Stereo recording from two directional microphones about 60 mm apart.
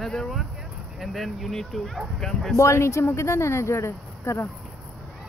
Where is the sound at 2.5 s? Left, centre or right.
Left.